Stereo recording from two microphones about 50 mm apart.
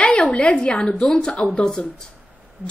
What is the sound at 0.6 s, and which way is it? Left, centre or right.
Speech, left.